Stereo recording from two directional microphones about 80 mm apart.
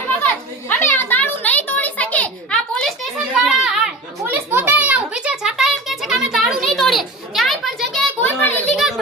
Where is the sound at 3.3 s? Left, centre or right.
Centre.